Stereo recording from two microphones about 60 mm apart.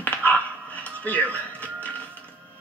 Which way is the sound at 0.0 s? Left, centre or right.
Left.